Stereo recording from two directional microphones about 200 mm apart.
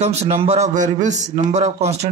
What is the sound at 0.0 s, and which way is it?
Speech, 30° right (ahead or behind).